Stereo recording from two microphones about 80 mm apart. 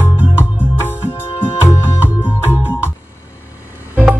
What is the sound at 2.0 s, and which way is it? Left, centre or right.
Music, right.